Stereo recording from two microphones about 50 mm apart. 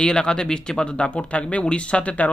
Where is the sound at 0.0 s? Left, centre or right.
Centre.